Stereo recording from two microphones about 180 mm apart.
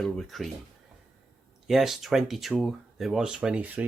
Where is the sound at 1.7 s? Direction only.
Centre (ahead or behind).